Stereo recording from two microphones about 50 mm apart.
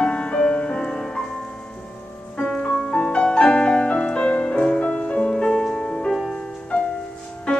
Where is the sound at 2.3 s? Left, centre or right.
Left.